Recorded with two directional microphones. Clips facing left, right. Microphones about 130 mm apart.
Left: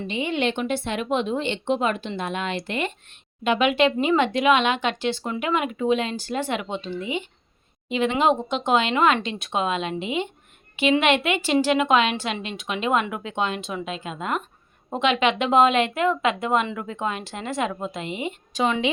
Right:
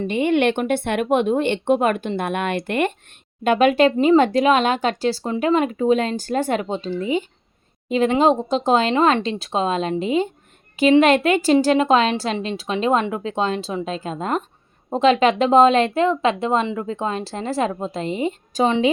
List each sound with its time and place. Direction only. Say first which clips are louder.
0.1 s speech: right 6 dB; 55° right (ahead or behind); by 18.9 s 35° right (ahead or behind)